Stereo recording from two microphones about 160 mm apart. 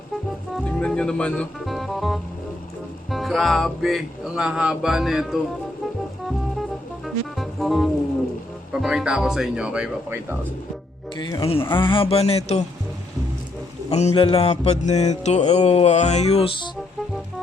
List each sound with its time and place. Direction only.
0.5 s speech: 5° left (ahead or behind)
3.1 s music: centre (ahead or behind)
11.2 s speech: 30° left (ahead or behind)
11.7 s a sound: 30° left (ahead or behind)
13.9 s music: 40° left (ahead or behind)